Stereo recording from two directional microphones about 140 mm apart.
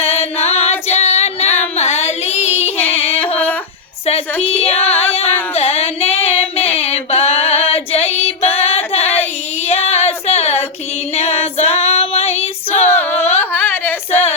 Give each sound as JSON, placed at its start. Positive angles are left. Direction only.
{"t": 0.0, "sound": "child singing", "side_deg": 45}
{"t": 2.6, "sound": "yodeling", "side_deg": 10}
{"t": 3.0, "sound": "a sound", "side_deg": 10}
{"t": 4.7, "sound": "music", "side_deg": 10}
{"t": 5.5, "sound": "female singing", "side_deg": 45}
{"t": 6.3, "sound": "a sound", "side_deg": 45}
{"t": 6.7, "sound": "female singing", "side_deg": 45}
{"t": 8.5, "sound": "singing", "side_deg": 45}
{"t": 9.0, "sound": "child singing", "side_deg": 15}
{"t": 9.9, "sound": "female singing", "side_deg": 45}
{"t": 12.7, "sound": "female singing", "side_deg": 15}
{"t": 13.4, "sound": "a sound", "side_deg": 15}